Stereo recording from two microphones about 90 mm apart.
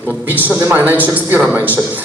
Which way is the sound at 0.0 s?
20° right (ahead or behind).